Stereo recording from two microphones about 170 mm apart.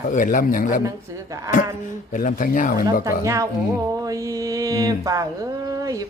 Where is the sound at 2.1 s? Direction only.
50° left (ahead or behind).